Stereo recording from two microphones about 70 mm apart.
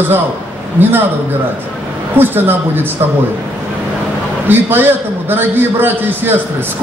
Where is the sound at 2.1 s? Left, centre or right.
Right.